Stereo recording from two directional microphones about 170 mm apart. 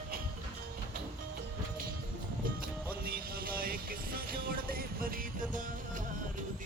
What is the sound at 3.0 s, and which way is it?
Music, 60° right (ahead or behind).